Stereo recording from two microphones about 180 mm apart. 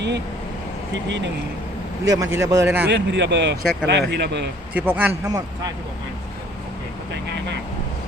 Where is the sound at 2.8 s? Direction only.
70° right (ahead or behind).